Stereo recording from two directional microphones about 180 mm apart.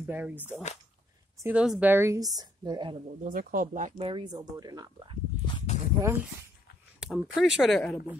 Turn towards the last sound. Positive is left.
turn(degrees=0)  # may be behind; listen again after turning